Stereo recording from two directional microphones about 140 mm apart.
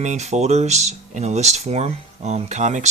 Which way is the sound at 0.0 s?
55° right (ahead or behind).